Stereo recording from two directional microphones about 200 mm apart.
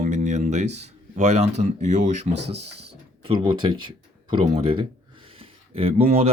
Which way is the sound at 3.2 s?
25° right (ahead or behind).